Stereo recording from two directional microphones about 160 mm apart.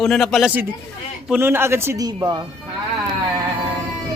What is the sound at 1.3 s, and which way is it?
A man's voice, 15° right (ahead or behind).